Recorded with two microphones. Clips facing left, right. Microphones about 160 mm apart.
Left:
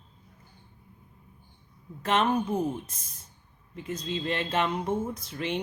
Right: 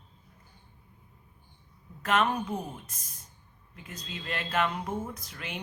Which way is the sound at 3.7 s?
25° left (ahead or behind).